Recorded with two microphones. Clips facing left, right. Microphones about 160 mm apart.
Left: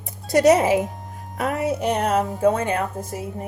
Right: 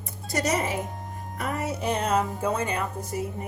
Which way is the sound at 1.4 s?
80° left.